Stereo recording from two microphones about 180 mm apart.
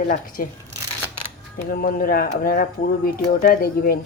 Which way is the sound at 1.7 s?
55° left (ahead or behind).